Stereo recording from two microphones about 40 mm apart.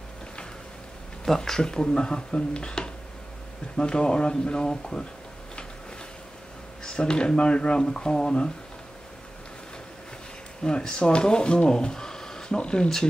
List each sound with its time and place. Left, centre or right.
1.2 s speech: centre
1.6 s speech: left
6.8 s speech: centre
10.6 s speech: centre